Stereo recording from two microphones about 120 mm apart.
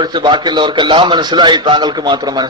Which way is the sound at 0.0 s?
40° right (ahead or behind).